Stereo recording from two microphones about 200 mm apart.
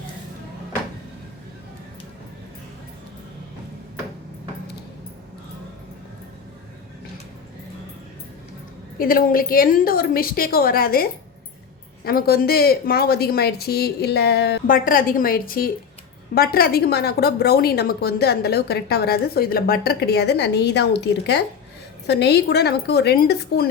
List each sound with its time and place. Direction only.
9.0 s a woman's voice: 45° left (ahead or behind)
12.0 s a woman's voice: 50° left (ahead or behind)